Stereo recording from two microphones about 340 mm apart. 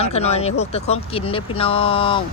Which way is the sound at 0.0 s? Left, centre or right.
Centre.